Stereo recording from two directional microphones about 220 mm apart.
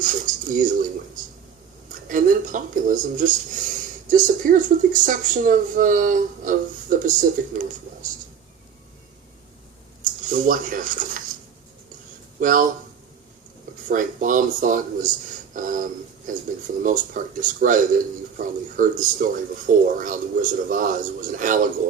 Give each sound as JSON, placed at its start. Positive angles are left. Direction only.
{"t": 0.0, "sound": "a woman's voice", "side_deg": -35}
{"t": 10.0, "sound": "speech", "side_deg": -35}
{"t": 12.4, "sound": "speech", "side_deg": -35}
{"t": 13.8, "sound": "a woman's voice", "side_deg": -35}